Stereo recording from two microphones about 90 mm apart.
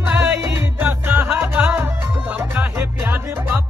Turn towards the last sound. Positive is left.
turn(degrees=-25)  # may be behind; listen again after turning